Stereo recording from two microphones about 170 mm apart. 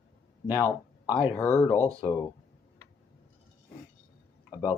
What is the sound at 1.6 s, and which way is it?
Speech, 40° left (ahead or behind).